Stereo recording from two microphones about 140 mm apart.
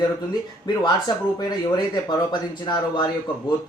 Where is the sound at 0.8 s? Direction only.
30° left (ahead or behind).